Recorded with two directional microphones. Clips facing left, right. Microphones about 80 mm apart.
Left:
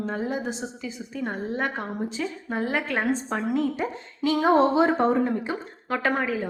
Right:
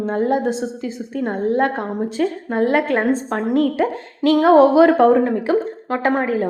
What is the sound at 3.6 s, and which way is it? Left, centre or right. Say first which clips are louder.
A woman's voice: right 9 dB; right.